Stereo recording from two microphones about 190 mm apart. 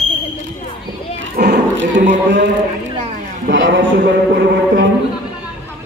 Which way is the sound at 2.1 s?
70° right (ahead or behind).